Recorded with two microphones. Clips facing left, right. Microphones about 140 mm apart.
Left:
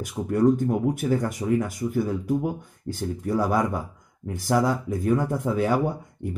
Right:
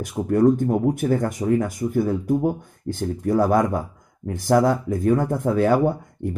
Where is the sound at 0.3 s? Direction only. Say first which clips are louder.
Right 3 dB; 40° right (ahead or behind).